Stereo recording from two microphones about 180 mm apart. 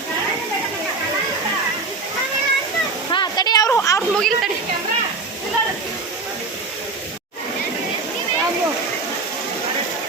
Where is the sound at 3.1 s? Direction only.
25° left (ahead or behind).